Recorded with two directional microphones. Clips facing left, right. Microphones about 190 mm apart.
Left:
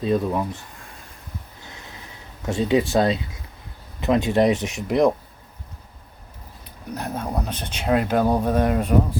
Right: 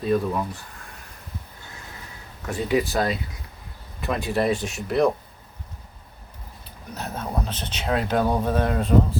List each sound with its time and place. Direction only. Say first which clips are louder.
0.0 s speech: left 1 dB; 25° left (ahead or behind)
2.5 s speech: left 3 dB; 25° left (ahead or behind)
6.9 s speech: left 2 dB; 10° left (ahead or behind)